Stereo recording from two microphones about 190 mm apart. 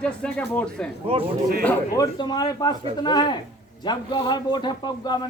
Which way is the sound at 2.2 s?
20° left (ahead or behind).